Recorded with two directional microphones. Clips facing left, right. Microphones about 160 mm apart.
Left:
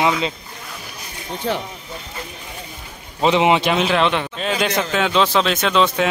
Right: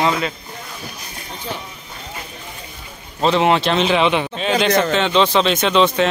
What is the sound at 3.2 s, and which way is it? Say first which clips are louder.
Speech: even; 15° left (ahead or behind).